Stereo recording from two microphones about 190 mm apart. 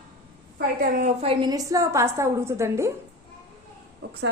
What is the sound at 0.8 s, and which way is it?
A woman's voice, 40° right (ahead or behind).